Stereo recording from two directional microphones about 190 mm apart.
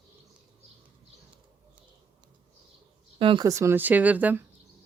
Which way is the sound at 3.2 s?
25° right (ahead or behind).